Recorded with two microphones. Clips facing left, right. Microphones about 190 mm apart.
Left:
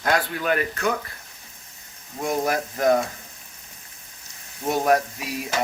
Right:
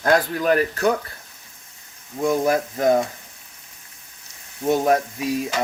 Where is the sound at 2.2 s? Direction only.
25° right (ahead or behind).